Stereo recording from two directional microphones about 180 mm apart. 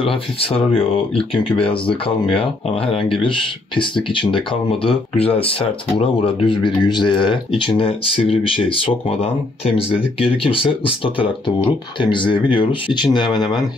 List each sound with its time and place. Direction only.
0.0 s speech: 30° left (ahead or behind)